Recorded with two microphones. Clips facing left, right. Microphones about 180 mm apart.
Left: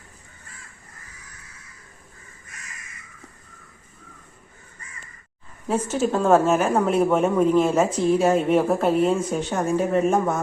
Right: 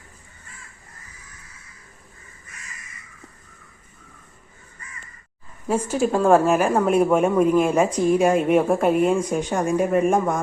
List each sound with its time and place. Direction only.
5.6 s a woman's voice: 10° right (ahead or behind)
9.4 s speech: 5° left (ahead or behind)
9.7 s a woman's voice: 10° right (ahead or behind)